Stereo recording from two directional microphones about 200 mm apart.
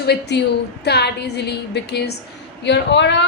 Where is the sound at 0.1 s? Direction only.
60° left (ahead or behind).